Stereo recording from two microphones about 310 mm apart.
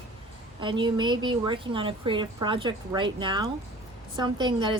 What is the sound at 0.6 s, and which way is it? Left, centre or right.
Speech, centre.